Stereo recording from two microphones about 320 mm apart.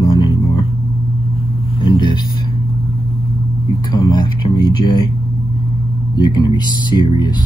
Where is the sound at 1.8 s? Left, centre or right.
Centre.